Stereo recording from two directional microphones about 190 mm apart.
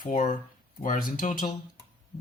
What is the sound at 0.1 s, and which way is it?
Speech, 45° left (ahead or behind).